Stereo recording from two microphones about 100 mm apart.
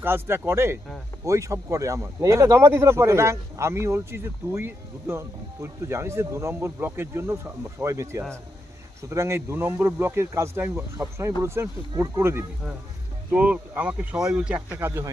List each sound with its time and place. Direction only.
0.0 s speech: 20° right (ahead or behind)
13.3 s speech: 15° right (ahead or behind)